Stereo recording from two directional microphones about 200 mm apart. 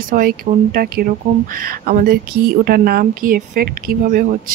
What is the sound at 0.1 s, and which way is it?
Speech, 45° right (ahead or behind).